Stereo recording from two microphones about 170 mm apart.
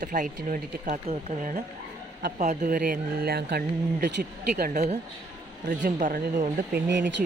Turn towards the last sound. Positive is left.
turn(degrees=-90)